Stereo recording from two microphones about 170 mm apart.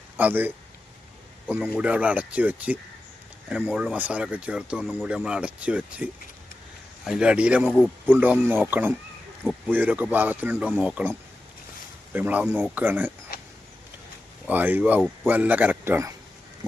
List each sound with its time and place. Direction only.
0.2 s a man's voice: 10° right (ahead or behind)
13.3 s a sound: 65° left (ahead or behind)
14.4 s speech: 10° right (ahead or behind)